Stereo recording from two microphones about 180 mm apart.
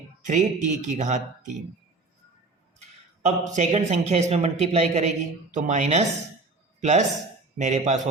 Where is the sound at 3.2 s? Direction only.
40° right (ahead or behind).